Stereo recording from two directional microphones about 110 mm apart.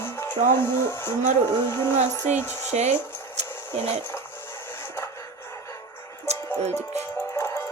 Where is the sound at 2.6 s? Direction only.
90° right.